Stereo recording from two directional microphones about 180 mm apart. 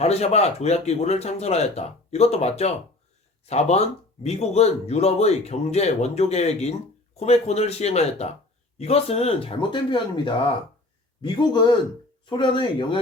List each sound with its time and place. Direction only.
0.0 s speech: 35° left (ahead or behind)